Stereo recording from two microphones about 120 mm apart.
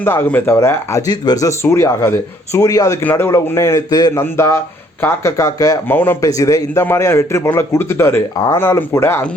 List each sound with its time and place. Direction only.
0.0 s a man's voice: 15° left (ahead or behind)
3.0 s a man's voice: 15° left (ahead or behind)
3.9 s speech: 35° left (ahead or behind)
4.2 s a man's voice: 20° left (ahead or behind)
5.9 s speech: 15° left (ahead or behind)
6.2 s a man's voice: 30° left (ahead or behind)